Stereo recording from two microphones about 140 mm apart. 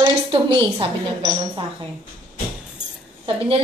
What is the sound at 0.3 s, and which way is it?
A woman's voice, 35° right (ahead or behind).